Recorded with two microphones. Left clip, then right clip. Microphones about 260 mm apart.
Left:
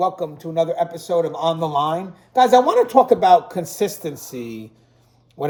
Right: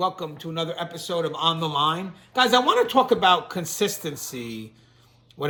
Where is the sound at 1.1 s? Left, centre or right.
Right.